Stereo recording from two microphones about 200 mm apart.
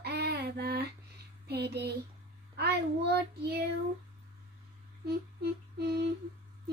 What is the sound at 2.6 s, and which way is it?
A child's voice, 55° right (ahead or behind).